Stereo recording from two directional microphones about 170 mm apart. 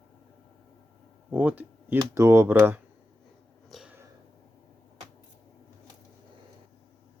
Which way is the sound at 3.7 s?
Centre (ahead or behind).